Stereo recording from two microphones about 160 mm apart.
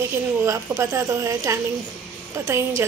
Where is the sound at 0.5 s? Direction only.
20° right (ahead or behind).